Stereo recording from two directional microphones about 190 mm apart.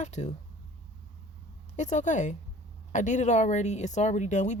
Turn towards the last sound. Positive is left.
turn(degrees=40)  # may be behind; listen again after turning